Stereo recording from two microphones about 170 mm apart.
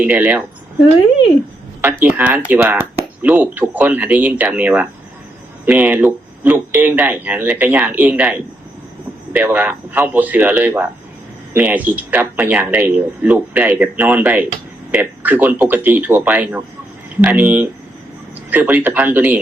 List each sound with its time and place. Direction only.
0.0 s speech: 10° right (ahead or behind)